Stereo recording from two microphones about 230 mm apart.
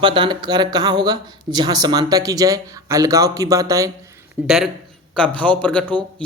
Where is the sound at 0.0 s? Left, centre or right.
Right.